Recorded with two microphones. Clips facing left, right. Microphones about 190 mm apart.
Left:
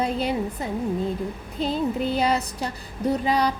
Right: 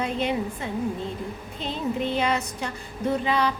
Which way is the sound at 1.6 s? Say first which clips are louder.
Left 4 dB; 40° left (ahead or behind).